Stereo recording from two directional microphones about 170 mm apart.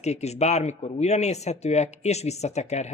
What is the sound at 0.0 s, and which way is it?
Speech, 40° left (ahead or behind).